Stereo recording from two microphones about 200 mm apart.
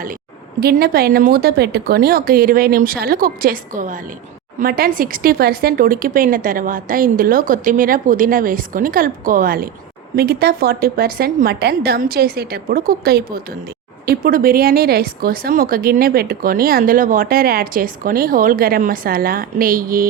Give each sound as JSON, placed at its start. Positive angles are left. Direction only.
{"t": 0.6, "sound": "speech", "side_deg": -50}